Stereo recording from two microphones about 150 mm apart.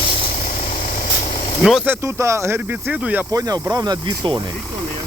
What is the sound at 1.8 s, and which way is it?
Speech, 20° right (ahead or behind).